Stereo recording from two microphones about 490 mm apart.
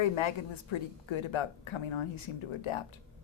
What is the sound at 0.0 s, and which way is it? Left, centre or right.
A woman's voice, left.